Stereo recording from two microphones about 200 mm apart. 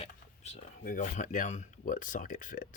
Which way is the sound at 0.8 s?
45° left (ahead or behind).